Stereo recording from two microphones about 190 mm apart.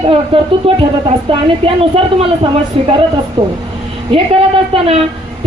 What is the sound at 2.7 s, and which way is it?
Speech, 30° right (ahead or behind).